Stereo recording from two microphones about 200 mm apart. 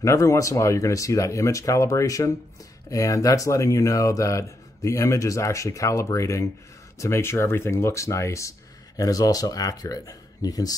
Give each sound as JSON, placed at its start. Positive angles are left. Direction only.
{"t": 0.0, "sound": "speech", "side_deg": 15}